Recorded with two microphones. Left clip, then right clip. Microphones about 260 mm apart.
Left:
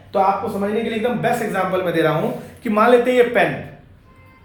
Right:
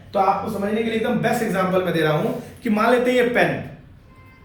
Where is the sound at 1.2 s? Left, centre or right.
Left.